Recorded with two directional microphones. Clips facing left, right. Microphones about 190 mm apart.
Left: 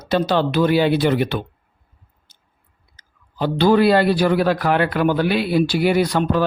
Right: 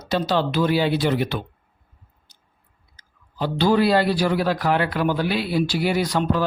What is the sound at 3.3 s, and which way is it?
Speech, 60° left (ahead or behind).